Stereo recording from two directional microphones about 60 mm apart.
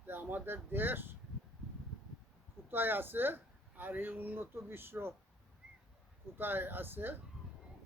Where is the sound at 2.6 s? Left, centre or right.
Right.